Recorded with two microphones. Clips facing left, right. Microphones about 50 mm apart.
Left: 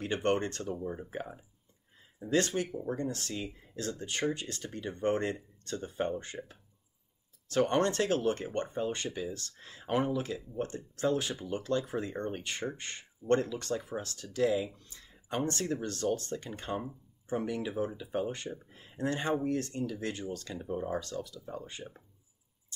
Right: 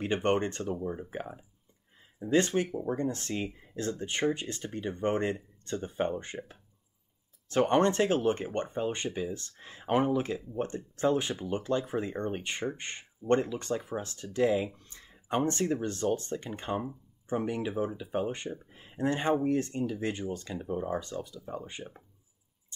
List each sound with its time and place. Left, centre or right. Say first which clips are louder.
0.0 s speech: right 2 dB; right
0.8 s speech: right 2 dB; centre
2.2 s speech: right 3 dB; right
3.0 s speech: right 4 dB; right